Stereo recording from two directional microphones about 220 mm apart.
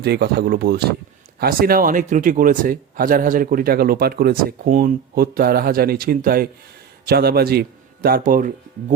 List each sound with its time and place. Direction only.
0.0 s a man's voice: 50° right (ahead or behind)